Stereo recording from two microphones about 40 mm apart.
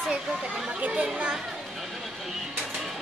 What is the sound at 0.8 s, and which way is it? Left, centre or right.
Chatter, right.